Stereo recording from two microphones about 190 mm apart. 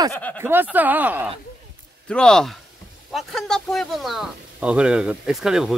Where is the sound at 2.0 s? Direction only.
5° left (ahead or behind).